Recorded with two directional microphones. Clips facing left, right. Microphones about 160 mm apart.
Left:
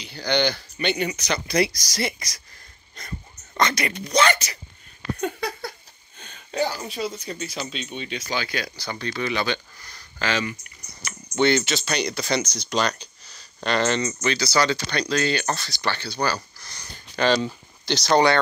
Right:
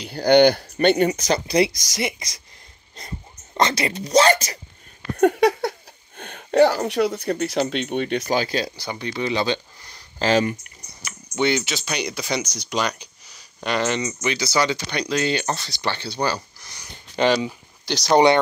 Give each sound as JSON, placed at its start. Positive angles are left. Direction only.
{"t": 0.0, "sound": "speech", "side_deg": -55}
{"t": 1.5, "sound": "speech", "side_deg": -20}
{"t": 5.1, "sound": "speech", "side_deg": -60}
{"t": 8.3, "sound": "speech", "side_deg": -40}
{"t": 8.8, "sound": "speech", "side_deg": -20}
{"t": 10.2, "sound": "speech", "side_deg": -40}
{"t": 11.1, "sound": "speech", "side_deg": -10}